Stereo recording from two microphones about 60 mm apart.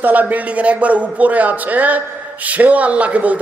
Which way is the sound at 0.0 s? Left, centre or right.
Right.